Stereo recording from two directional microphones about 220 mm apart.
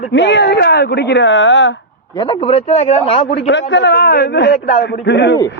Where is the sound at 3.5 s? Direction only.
55° left (ahead or behind).